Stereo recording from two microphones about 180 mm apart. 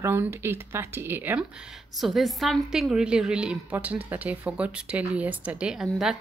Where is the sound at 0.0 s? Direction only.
15° right (ahead or behind).